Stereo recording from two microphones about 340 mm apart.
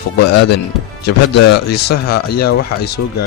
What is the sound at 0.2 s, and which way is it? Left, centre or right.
A man's voice, left.